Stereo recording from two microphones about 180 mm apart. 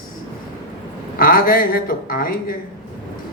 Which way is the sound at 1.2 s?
50° left (ahead or behind).